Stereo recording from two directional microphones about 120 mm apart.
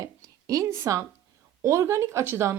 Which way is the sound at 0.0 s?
30° right (ahead or behind).